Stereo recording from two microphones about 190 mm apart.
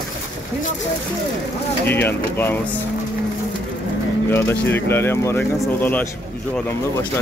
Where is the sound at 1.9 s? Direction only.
10° left (ahead or behind).